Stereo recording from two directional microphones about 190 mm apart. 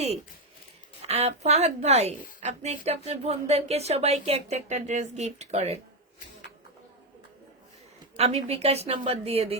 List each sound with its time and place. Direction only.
1.0 s a woman's voice: 35° right (ahead or behind)
8.1 s a woman's voice: 30° right (ahead or behind)